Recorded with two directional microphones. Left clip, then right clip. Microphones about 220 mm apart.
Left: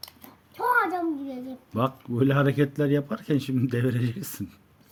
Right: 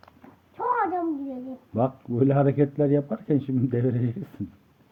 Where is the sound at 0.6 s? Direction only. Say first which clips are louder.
Left 1 dB; 30° left (ahead or behind).